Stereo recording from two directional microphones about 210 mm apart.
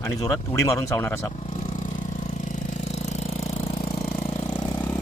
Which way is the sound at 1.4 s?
35° left (ahead or behind).